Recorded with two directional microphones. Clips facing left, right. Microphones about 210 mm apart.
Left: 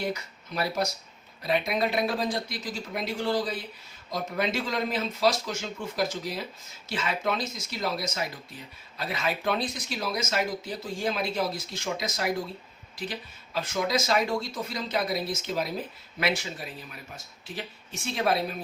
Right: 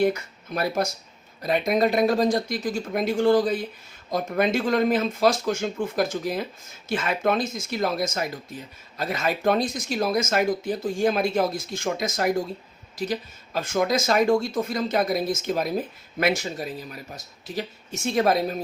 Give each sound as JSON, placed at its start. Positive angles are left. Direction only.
{"t": 0.0, "sound": "speech", "side_deg": -50}